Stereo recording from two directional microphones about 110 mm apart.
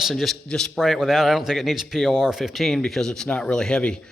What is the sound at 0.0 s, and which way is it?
A man's voice, centre (ahead or behind).